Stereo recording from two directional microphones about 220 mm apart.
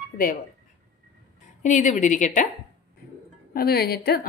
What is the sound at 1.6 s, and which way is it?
Speech, 35° left (ahead or behind).